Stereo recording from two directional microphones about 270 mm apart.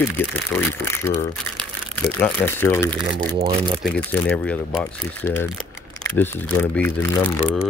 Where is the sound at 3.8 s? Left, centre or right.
Centre.